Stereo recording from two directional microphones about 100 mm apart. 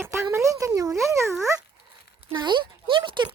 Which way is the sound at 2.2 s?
50° right (ahead or behind).